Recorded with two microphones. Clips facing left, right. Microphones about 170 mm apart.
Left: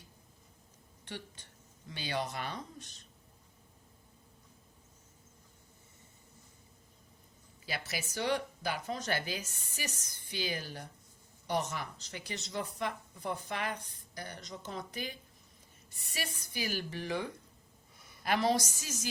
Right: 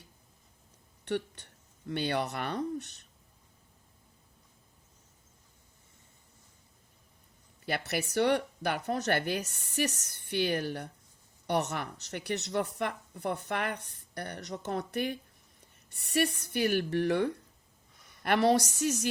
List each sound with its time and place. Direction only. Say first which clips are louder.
1.0 s speech: right 12 dB; 65° right (ahead or behind)
7.6 s speech: right 7 dB; 60° right (ahead or behind)